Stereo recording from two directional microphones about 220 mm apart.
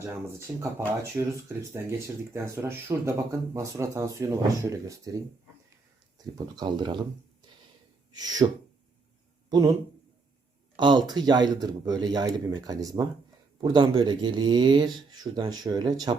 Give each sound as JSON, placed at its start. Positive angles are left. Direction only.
{"t": 0.0, "sound": "speech", "side_deg": -15}
{"t": 2.3, "sound": "speech", "side_deg": -10}
{"t": 8.1, "sound": "speech", "side_deg": -15}
{"t": 9.5, "sound": "a man's voice", "side_deg": -15}
{"t": 10.8, "sound": "speech", "side_deg": -20}